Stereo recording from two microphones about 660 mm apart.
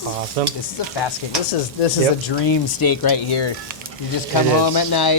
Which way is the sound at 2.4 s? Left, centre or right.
Left.